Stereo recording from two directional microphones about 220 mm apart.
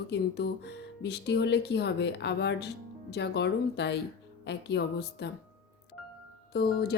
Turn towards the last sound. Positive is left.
turn(degrees=45)  # may be behind; listen again after turning